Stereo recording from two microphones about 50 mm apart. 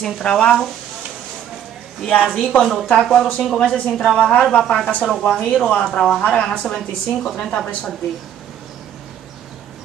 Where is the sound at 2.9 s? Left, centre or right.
Centre.